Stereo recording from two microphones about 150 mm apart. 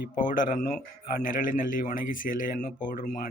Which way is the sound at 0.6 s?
50° left (ahead or behind).